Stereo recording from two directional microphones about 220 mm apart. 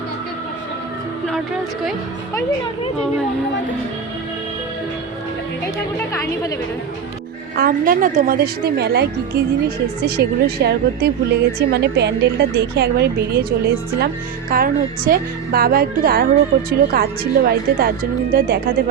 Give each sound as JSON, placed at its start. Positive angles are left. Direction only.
{"t": 7.5, "sound": "a woman's voice", "side_deg": -40}
{"t": 14.5, "sound": "a woman's voice", "side_deg": -40}